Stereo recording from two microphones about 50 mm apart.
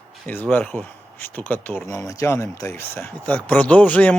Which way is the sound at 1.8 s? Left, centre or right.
Left.